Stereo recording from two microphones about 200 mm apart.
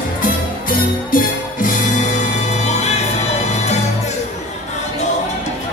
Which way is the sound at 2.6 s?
35° left (ahead or behind).